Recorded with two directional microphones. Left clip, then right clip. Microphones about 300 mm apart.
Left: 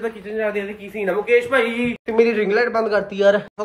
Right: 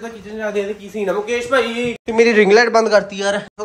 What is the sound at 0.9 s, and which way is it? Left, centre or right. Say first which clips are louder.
Speech: left 3 dB; centre.